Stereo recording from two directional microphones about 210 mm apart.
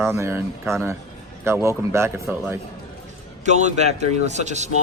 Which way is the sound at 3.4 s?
35° right (ahead or behind).